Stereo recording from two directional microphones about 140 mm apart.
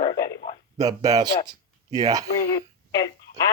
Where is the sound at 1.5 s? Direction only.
25° right (ahead or behind).